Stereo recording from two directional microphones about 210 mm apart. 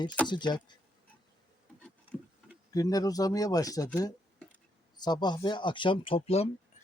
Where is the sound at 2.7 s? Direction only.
15° left (ahead or behind).